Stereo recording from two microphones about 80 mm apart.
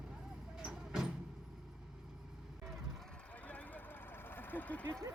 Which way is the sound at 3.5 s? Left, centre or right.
Centre.